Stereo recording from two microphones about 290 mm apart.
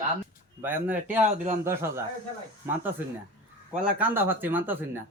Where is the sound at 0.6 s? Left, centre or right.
Centre.